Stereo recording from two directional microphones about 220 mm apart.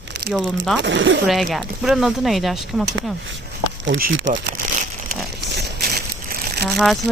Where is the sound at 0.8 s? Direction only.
55° right (ahead or behind).